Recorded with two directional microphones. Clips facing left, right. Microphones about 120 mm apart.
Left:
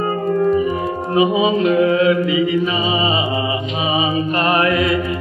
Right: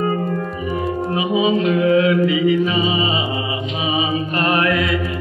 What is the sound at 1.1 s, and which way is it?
Music, 30° left (ahead or behind).